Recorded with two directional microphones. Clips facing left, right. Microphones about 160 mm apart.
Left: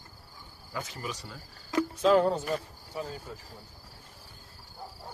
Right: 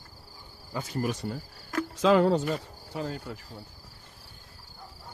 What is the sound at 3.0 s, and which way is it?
Cricket, 75° right (ahead or behind).